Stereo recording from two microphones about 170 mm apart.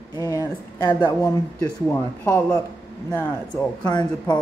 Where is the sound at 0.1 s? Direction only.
20° left (ahead or behind).